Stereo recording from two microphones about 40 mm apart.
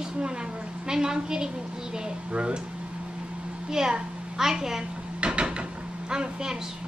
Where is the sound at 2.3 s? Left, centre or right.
Right.